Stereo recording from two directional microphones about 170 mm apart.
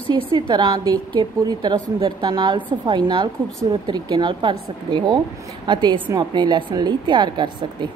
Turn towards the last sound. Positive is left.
turn(degrees=-25)  # may be behind; listen again after turning